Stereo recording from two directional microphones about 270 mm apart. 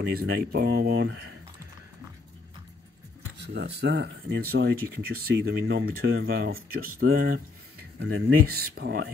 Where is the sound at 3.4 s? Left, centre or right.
Right.